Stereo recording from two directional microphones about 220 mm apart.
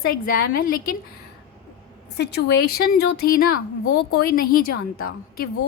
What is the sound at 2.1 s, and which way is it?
A woman's voice, 50° left (ahead or behind).